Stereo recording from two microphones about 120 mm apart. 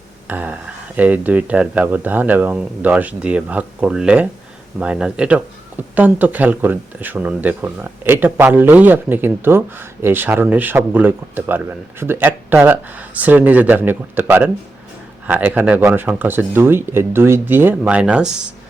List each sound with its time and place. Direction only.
0.3 s speech: 15° right (ahead or behind)